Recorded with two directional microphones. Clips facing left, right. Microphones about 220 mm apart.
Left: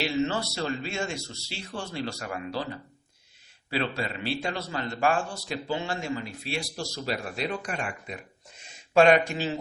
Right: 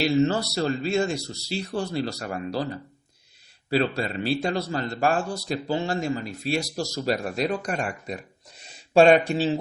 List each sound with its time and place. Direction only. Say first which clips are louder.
0.0 s a man's voice: right 6 dB; 40° right (ahead or behind)